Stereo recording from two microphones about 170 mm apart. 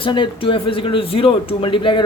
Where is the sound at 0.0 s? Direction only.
30° left (ahead or behind).